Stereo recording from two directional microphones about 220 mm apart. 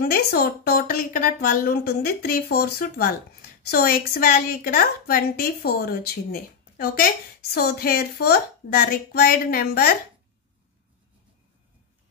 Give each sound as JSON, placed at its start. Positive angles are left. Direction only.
{"t": 0.0, "sound": "a woman's voice", "side_deg": 45}